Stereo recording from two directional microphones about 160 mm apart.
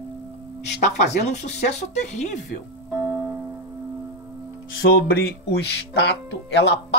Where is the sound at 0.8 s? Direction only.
45° left (ahead or behind).